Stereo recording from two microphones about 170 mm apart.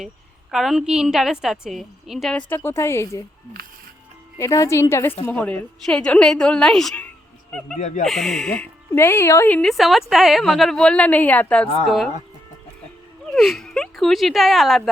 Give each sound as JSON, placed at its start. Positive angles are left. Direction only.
{"t": 0.5, "sound": "speech", "side_deg": 0}
{"t": 2.6, "sound": "a woman's voice", "side_deg": 15}
{"t": 4.4, "sound": "a woman's voice", "side_deg": 20}
{"t": 7.8, "sound": "speech", "side_deg": 45}
{"t": 8.0, "sound": "speech", "side_deg": 0}
{"t": 13.3, "sound": "speech", "side_deg": 0}